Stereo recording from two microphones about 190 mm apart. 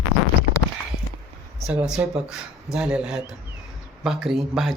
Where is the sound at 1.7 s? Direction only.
5° right (ahead or behind).